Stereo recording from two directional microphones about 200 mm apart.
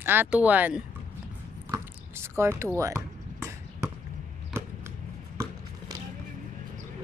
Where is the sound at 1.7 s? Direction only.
15° right (ahead or behind).